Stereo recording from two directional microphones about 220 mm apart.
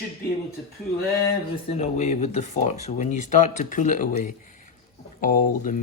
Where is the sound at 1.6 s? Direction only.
30° left (ahead or behind).